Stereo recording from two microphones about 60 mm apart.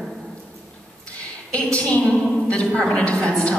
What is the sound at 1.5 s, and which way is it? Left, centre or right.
A woman's voice, centre.